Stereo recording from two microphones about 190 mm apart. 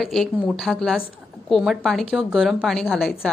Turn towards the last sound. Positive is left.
turn(degrees=0)  # may be behind; listen again after turning